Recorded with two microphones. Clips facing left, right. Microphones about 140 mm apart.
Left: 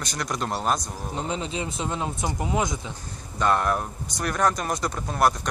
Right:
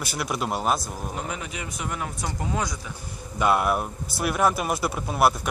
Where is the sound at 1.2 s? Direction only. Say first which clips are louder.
Left 8 dB; 25° left (ahead or behind).